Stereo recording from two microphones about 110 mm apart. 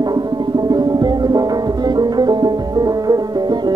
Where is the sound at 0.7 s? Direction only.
40° right (ahead or behind).